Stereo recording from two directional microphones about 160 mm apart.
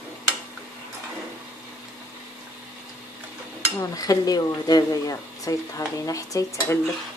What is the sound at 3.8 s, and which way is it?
Speech, 20° left (ahead or behind).